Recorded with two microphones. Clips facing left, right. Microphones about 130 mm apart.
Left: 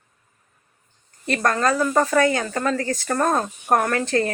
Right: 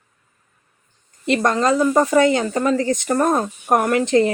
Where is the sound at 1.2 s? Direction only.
20° right (ahead or behind).